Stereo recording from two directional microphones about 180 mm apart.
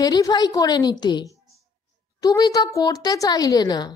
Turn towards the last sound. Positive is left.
turn(degrees=25)  # may be behind; listen again after turning